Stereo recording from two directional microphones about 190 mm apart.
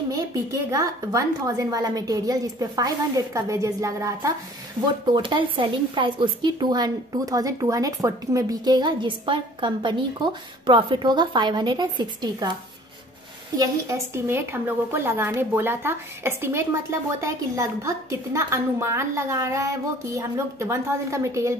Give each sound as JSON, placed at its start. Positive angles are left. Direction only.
{"t": 0.1, "sound": "speech", "side_deg": -15}
{"t": 13.6, "sound": "a woman's voice", "side_deg": -15}